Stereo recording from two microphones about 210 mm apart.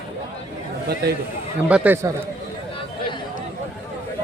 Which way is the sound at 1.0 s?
50° right (ahead or behind).